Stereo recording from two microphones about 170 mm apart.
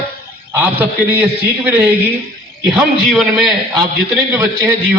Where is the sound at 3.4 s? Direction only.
30° right (ahead or behind).